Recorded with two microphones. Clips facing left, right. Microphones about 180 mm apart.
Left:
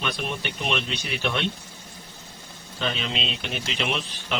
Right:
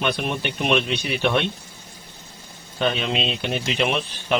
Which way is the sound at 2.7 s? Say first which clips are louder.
Right 6 dB; 55° right (ahead or behind).